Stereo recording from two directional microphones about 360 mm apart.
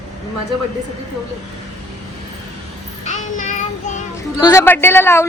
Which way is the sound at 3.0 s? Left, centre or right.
Centre.